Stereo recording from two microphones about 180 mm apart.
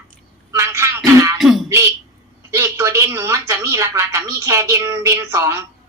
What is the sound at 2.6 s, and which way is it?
A woman's voice, 15° right (ahead or behind).